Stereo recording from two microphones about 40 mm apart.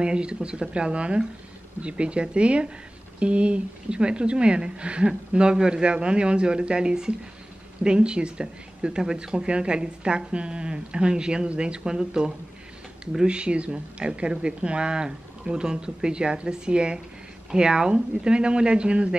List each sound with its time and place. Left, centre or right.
0.0 s a woman's voice: right